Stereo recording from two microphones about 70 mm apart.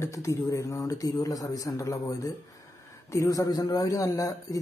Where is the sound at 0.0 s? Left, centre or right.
Left.